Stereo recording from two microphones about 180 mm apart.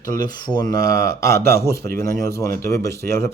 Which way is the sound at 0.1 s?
20° left (ahead or behind).